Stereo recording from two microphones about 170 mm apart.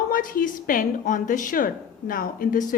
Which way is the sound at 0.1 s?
55° left (ahead or behind).